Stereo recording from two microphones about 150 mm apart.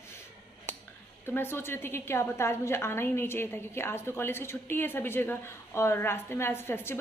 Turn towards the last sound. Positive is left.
turn(degrees=15)  # may be behind; listen again after turning